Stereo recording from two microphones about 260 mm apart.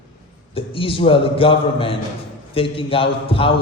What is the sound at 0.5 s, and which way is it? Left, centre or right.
A man's voice, left.